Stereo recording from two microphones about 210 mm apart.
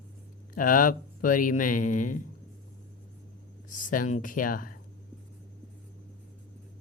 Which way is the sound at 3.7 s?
40° left (ahead or behind).